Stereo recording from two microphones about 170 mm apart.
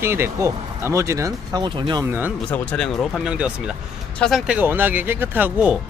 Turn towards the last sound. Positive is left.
turn(degrees=-10)  # may be behind; listen again after turning